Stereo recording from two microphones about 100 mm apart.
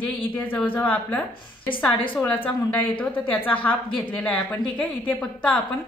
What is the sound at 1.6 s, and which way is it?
Speech, 60° left (ahead or behind).